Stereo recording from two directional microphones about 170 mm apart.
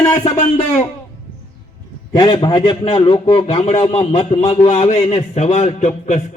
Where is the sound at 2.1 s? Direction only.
30° left (ahead or behind).